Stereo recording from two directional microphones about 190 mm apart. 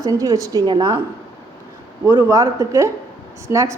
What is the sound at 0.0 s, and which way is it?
Speech, 20° right (ahead or behind).